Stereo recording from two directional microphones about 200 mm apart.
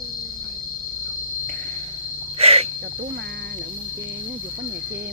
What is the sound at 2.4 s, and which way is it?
Cricket, 30° right (ahead or behind).